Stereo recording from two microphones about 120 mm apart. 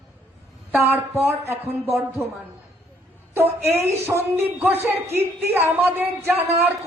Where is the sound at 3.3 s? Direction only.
20° right (ahead or behind).